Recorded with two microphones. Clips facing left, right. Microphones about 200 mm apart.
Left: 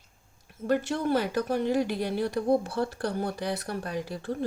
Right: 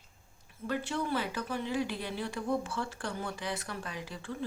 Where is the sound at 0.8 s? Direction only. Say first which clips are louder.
Left 6 dB; 45° left (ahead or behind).